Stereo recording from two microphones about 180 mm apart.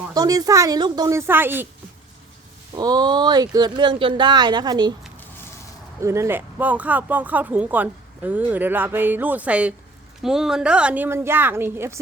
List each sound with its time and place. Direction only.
0.1 s speech: 20° right (ahead or behind)
2.7 s speech: 25° right (ahead or behind)
6.0 s speech: 15° right (ahead or behind)